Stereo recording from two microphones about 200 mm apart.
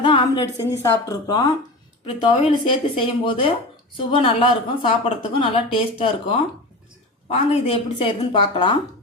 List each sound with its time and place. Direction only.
0.0 s a woman's voice: 25° left (ahead or behind)